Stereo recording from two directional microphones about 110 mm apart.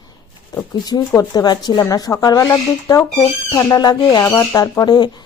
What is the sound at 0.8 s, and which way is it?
Speech, 35° left (ahead or behind).